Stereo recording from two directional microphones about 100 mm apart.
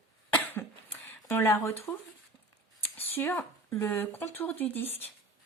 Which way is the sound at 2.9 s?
25° left (ahead or behind).